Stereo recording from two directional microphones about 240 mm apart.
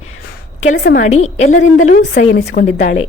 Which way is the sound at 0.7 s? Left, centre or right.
Left.